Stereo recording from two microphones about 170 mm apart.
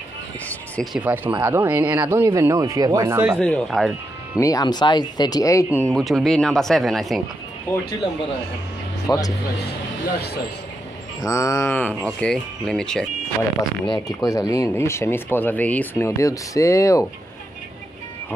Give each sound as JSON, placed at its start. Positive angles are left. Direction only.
{"t": 0.9, "sound": "speech", "side_deg": -10}
{"t": 3.3, "sound": "speech", "side_deg": 5}
{"t": 4.4, "sound": "speech", "side_deg": 20}
{"t": 5.8, "sound": "speech", "side_deg": 5}
{"t": 7.7, "sound": "speech", "side_deg": 10}
{"t": 9.0, "sound": "speech", "side_deg": 20}
{"t": 11.1, "sound": "speech", "side_deg": 20}
{"t": 13.8, "sound": "speech", "side_deg": 25}